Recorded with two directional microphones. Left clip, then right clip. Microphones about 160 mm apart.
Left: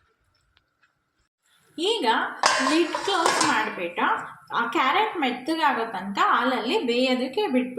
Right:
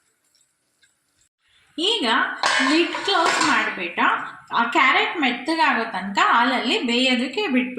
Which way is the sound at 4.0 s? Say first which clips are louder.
Right 4 dB; 40° right (ahead or behind).